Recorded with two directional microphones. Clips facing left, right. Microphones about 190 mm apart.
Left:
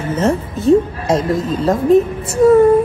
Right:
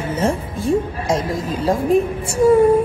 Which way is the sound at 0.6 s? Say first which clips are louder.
Left 6 dB; 30° left (ahead or behind).